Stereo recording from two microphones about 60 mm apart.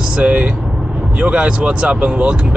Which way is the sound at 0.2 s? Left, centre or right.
Right.